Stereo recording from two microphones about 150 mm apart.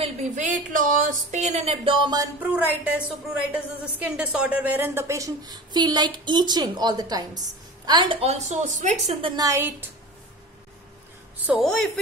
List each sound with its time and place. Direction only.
0.0 s speech: 50° right (ahead or behind)
2.4 s a woman's voice: 10° right (ahead or behind); by 8.2 s 30° right (ahead or behind)
8.2 s speech: 50° right (ahead or behind)
9.3 s a woman's voice: 20° right (ahead or behind)
11.3 s a woman's voice: 10° right (ahead or behind)
11.6 s speech: centre (ahead or behind)